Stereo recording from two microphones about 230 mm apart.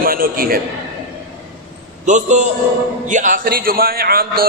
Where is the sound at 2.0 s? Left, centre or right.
Right.